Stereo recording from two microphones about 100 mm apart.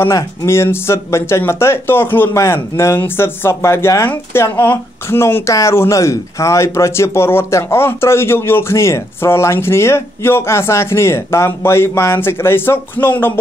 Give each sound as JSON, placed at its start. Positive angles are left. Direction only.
{"t": 0.0, "sound": "speech", "side_deg": 30}